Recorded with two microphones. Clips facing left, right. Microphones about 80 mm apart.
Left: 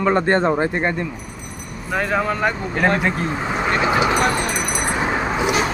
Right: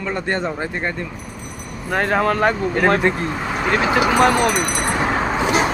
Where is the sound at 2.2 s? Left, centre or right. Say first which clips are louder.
Right 4 dB; right.